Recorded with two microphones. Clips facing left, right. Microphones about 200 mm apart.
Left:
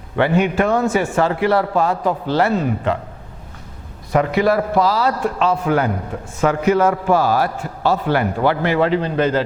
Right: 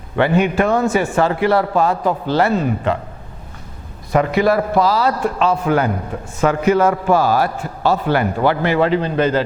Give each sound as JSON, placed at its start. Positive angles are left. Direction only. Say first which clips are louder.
{"t": 0.2, "sound": "a man's voice", "louder": "right 1 dB", "side_deg": -15}
{"t": 4.1, "sound": "a man's voice", "louder": "right 1 dB", "side_deg": -20}